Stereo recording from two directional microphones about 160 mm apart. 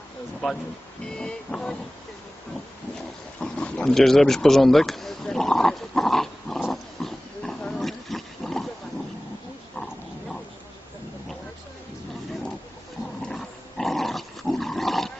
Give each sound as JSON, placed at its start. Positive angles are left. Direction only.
{"t": 0.4, "sound": "music", "side_deg": 0}
{"t": 3.4, "sound": "a sound", "side_deg": 5}
{"t": 9.7, "sound": "dog", "side_deg": 5}
{"t": 13.2, "sound": "dog", "side_deg": 0}